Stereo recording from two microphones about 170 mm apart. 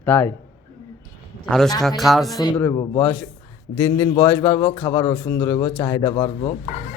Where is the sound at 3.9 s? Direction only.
25° left (ahead or behind).